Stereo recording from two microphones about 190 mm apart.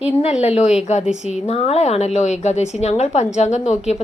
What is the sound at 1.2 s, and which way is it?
A woman's voice, 35° left (ahead or behind).